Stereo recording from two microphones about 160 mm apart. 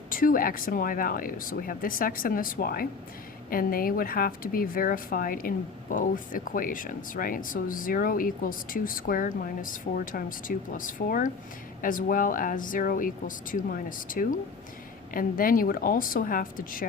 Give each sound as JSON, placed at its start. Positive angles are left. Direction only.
{"t": 0.1, "sound": "speech", "side_deg": 60}